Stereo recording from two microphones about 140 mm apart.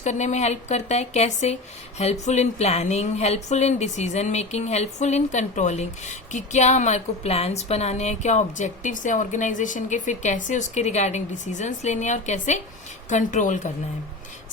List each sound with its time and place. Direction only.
0.0 s a woman's voice: 55° left (ahead or behind)